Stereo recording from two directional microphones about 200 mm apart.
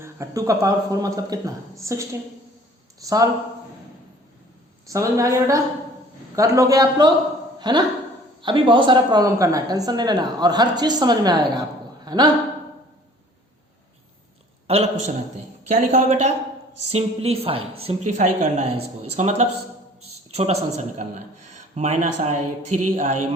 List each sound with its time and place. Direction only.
0.0 s a man's voice: 15° right (ahead or behind)
4.9 s a man's voice: 15° right (ahead or behind)
14.7 s a woman's voice: 30° right (ahead or behind)